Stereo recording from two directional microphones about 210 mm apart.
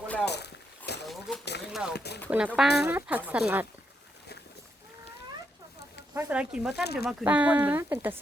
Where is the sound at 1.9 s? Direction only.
50° left (ahead or behind).